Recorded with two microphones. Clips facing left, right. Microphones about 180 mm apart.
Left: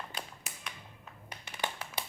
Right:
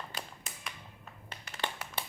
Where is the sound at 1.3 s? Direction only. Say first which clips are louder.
Left 1 dB; 15° left (ahead or behind).